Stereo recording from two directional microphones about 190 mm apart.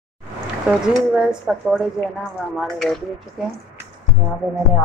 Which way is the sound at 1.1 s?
5° right (ahead or behind).